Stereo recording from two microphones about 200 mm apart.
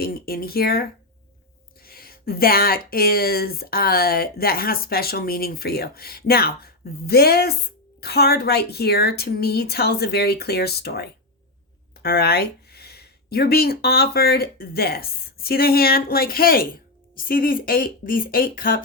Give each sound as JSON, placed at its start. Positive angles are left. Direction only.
{"t": 0.0, "sound": "speech", "side_deg": 50}